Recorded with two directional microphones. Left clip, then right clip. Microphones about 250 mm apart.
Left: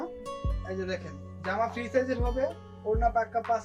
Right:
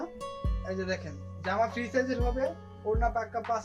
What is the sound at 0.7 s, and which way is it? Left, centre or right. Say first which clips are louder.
Speech: right 1 dB; centre.